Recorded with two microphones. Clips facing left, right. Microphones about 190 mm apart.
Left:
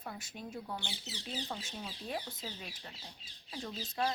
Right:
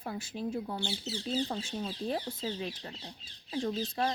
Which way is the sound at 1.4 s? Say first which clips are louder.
Right 7 dB; 30° right (ahead or behind).